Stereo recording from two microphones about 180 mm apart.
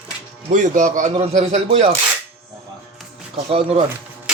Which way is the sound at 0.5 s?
45° right (ahead or behind).